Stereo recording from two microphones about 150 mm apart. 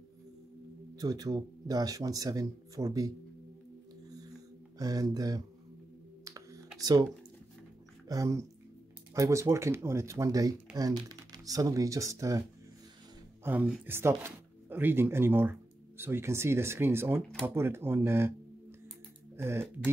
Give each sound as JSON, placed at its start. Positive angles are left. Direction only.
{"t": 0.9, "sound": "speech", "side_deg": -25}
{"t": 4.7, "sound": "speech", "side_deg": -25}
{"t": 6.2, "sound": "computer keyboard", "side_deg": -20}
{"t": 6.8, "sound": "speech", "side_deg": -25}
{"t": 8.1, "sound": "speech", "side_deg": -20}
{"t": 19.3, "sound": "speech", "side_deg": -15}